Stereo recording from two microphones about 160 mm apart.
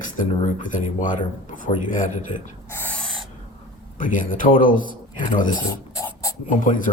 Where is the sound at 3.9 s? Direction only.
55° left (ahead or behind).